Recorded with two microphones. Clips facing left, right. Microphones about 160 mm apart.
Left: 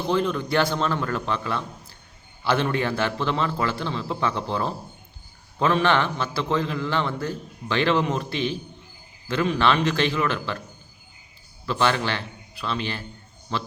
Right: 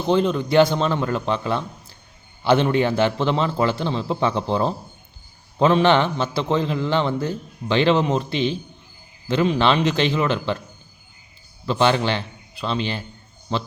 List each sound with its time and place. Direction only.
0.0 s a man's voice: 25° right (ahead or behind)
11.6 s a man's voice: 25° right (ahead or behind)